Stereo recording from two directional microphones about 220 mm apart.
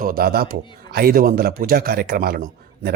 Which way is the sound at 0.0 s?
40° right (ahead or behind).